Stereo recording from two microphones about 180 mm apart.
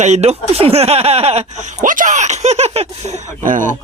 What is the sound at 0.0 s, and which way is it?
A man's voice, 40° right (ahead or behind).